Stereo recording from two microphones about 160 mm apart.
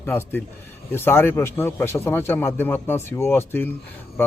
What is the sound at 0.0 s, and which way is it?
A man's voice, 15° left (ahead or behind).